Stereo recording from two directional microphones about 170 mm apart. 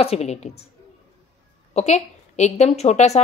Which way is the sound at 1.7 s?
40° left (ahead or behind).